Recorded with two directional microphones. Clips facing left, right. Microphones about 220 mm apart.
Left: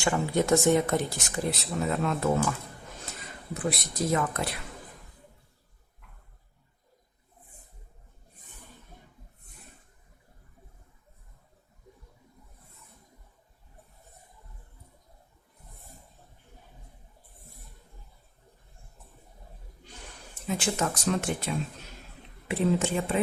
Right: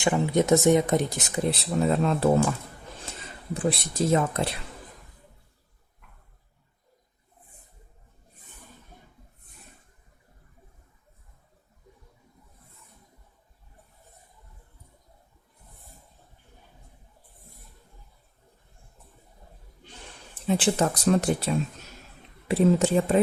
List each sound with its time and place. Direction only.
0.0 s speech: 20° right (ahead or behind)
20.5 s speech: 35° right (ahead or behind)